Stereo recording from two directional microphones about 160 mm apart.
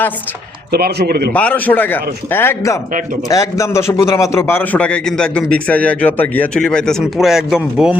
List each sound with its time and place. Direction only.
0.7 s speech: 85° right
1.3 s a man's voice: 10° left (ahead or behind)